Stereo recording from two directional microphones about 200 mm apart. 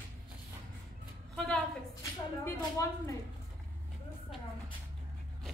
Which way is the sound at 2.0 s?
15° left (ahead or behind).